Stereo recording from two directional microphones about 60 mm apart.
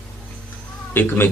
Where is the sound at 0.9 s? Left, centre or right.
Left.